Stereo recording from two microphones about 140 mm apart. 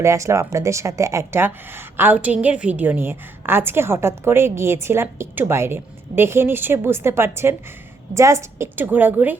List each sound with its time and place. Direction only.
0.0 s a woman's voice: 20° right (ahead or behind)